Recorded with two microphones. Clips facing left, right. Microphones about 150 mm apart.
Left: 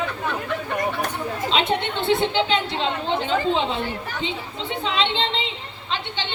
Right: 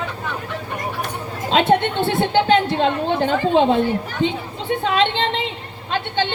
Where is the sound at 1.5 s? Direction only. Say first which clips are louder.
Right 8 dB; 55° right (ahead or behind).